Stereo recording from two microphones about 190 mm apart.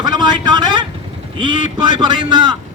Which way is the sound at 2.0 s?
25° right (ahead or behind).